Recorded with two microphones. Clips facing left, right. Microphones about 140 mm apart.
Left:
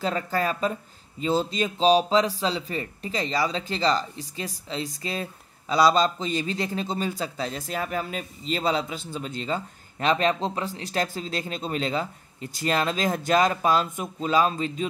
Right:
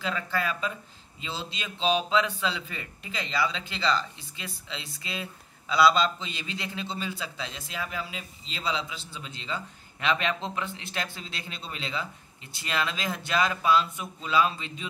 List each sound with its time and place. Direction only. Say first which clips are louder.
0.0 s speech: left 5 dB; 40° left (ahead or behind)